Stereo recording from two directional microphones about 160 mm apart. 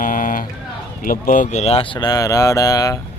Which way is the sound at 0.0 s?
55° left (ahead or behind).